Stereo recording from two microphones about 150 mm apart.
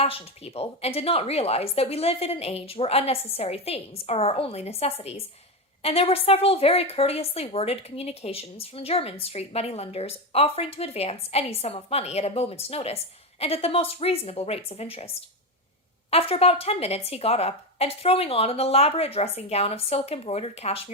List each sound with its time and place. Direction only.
0.0 s a woman's voice: 40° left (ahead or behind)